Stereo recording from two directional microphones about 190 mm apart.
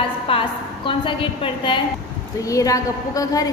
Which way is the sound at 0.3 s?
25° left (ahead or behind).